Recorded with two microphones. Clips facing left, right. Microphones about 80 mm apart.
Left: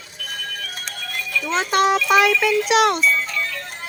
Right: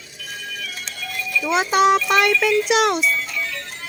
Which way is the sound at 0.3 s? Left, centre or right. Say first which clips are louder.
Left 1 dB; left.